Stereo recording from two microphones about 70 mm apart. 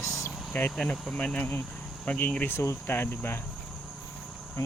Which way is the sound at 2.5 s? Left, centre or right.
Left.